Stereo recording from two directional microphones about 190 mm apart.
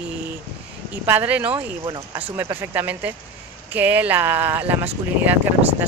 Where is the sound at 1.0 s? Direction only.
10° right (ahead or behind).